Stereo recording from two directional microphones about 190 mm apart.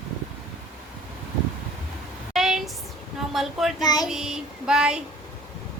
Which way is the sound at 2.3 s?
Centre (ahead or behind).